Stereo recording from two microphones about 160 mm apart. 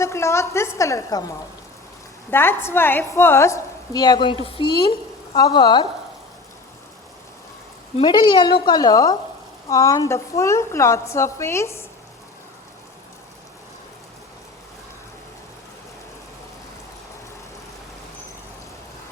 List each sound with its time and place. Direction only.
0.0 s a woman's voice: 15° left (ahead or behind)
8.0 s a woman's voice: 25° left (ahead or behind)